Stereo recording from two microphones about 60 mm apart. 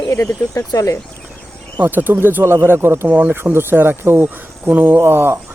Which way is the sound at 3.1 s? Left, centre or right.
Right.